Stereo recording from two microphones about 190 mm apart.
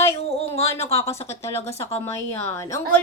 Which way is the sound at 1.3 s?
15° left (ahead or behind).